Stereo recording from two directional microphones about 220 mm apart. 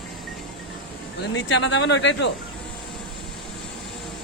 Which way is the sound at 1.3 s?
60° left (ahead or behind).